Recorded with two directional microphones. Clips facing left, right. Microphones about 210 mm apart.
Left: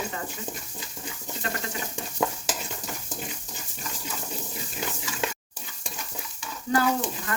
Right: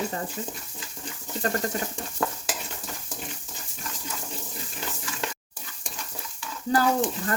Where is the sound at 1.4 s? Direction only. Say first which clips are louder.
Right 6 dB; 40° right (ahead or behind).